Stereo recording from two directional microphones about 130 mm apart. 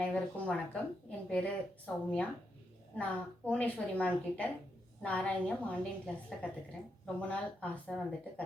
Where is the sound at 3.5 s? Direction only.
10° left (ahead or behind).